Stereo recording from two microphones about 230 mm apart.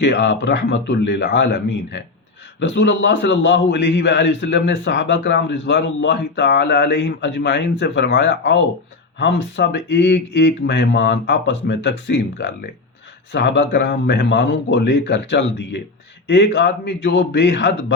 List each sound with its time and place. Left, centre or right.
0.0 s a man's voice: left